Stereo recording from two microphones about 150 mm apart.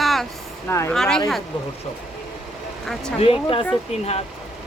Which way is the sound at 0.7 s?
15° left (ahead or behind).